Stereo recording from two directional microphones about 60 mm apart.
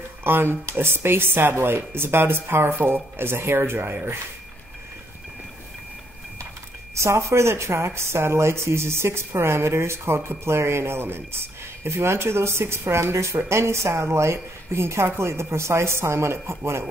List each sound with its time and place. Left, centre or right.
0.2 s speech: right
7.0 s speech: right